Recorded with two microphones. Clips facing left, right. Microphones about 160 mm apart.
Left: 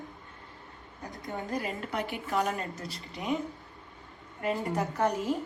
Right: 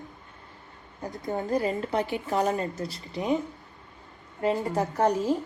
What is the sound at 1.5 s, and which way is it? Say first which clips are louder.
A woman's voice: right 7 dB; 30° right (ahead or behind).